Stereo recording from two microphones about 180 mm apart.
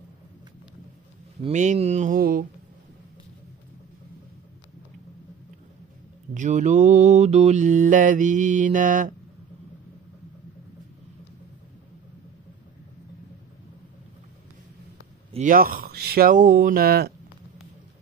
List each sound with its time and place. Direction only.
1.5 s mantra: 40° right (ahead or behind)
6.3 s mantra: 45° right (ahead or behind)
15.3 s mantra: 50° right (ahead or behind)